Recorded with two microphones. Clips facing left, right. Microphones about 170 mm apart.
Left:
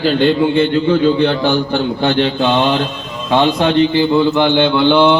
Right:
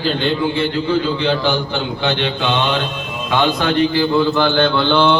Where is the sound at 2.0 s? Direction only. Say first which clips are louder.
Left 5 dB; 45° left (ahead or behind).